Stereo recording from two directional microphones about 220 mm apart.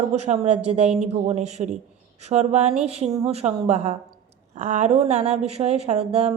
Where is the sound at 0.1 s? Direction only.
30° right (ahead or behind).